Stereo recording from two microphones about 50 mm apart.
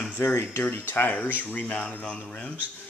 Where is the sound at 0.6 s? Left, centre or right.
Left.